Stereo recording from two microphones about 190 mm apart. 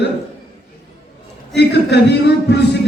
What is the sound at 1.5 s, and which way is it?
A man's voice, 65° left (ahead or behind).